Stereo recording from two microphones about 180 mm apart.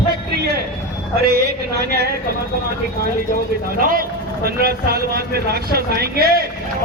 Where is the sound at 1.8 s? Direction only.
60° right (ahead or behind).